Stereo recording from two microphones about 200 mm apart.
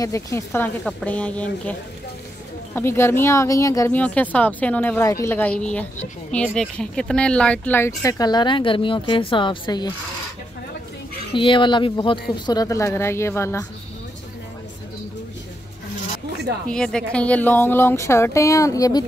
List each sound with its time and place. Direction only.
0.0 s speech: 15° left (ahead or behind)
11.3 s speech: 25° left (ahead or behind)
16.6 s speech: 5° left (ahead or behind)